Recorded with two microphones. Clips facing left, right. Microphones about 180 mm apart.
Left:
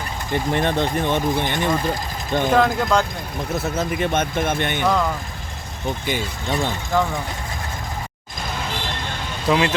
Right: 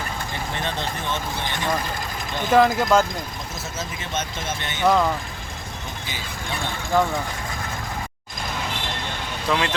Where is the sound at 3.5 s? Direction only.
60° left (ahead or behind).